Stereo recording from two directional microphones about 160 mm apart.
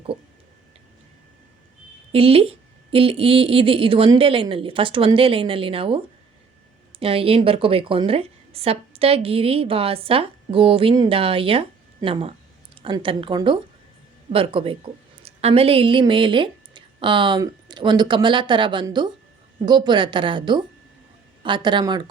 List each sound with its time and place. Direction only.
2.1 s a woman's voice: 35° right (ahead or behind)
7.0 s a woman's voice: 35° right (ahead or behind)